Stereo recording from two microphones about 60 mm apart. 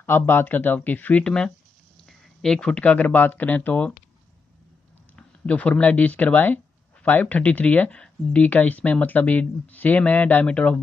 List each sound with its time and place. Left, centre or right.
0.0 s speech: left
1.2 s speech: centre
5.1 s speech: left